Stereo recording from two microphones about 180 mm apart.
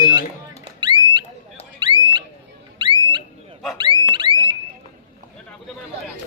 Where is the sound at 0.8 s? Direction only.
25° right (ahead or behind).